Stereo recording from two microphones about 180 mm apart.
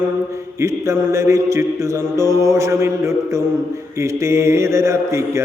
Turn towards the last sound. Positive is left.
turn(degrees=-15)  # may be behind; listen again after turning